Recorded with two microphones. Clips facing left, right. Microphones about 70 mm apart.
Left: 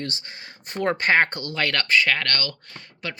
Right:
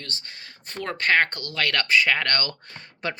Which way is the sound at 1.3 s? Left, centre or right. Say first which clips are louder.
Left 1 dB; centre.